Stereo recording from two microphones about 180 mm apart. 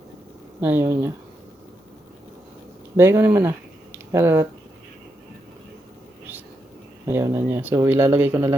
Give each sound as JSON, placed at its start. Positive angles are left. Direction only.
{"t": 0.6, "sound": "speech", "side_deg": -10}
{"t": 2.9, "sound": "speech", "side_deg": -15}
{"t": 3.9, "sound": "a sound", "side_deg": -10}
{"t": 7.0, "sound": "speech", "side_deg": -15}